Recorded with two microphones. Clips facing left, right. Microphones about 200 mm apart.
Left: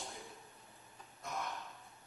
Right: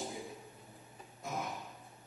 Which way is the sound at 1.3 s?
5° right (ahead or behind).